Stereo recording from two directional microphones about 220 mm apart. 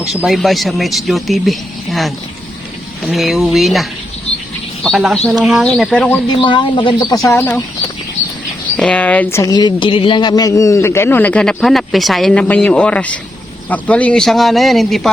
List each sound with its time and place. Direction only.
0.0 s speech: centre (ahead or behind)
4.3 s bird: 25° left (ahead or behind)
4.8 s speech: centre (ahead or behind)
6.2 s speech: 20° left (ahead or behind)
8.2 s a sound: 30° left (ahead or behind)
8.8 s speech: 5° left (ahead or behind)